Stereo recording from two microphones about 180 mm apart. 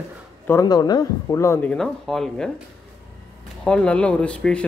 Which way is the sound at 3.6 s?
5° left (ahead or behind).